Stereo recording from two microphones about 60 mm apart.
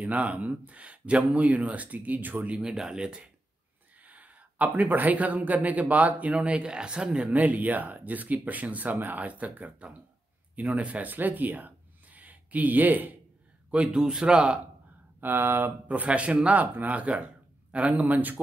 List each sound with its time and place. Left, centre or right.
0.0 s speech: right
2.7 s a man's voice: centre
4.0 s speech: right
13.7 s a man's voice: centre
15.1 s speech: right
15.9 s speech: right